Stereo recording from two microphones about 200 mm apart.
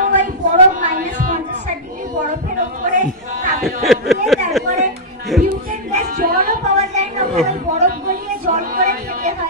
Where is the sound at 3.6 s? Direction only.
Centre (ahead or behind).